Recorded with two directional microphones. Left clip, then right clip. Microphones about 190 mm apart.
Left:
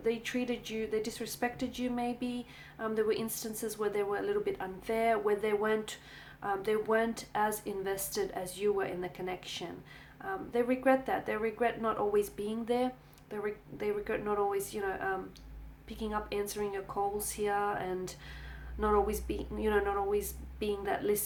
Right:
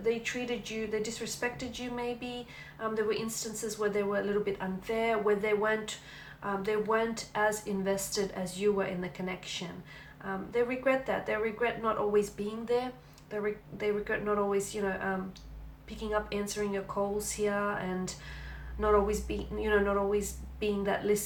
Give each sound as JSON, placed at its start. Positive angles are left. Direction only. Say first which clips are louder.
{"t": 0.0, "sound": "a woman's voice", "louder": "right 2 dB", "side_deg": 55}